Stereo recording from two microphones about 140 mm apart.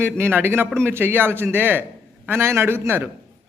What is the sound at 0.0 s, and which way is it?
A man's voice, 15° right (ahead or behind).